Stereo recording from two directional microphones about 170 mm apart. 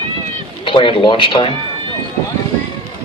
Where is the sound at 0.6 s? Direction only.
30° left (ahead or behind).